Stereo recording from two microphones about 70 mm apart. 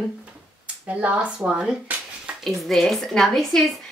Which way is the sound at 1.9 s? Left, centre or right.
Right.